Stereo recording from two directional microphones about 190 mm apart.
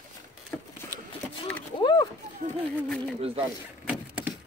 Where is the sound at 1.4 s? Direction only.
25° left (ahead or behind).